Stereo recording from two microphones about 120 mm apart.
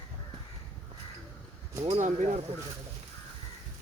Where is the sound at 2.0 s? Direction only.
90° right.